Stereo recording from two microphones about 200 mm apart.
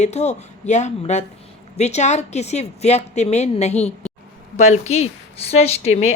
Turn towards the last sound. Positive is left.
turn(degrees=30)  # may be behind; listen again after turning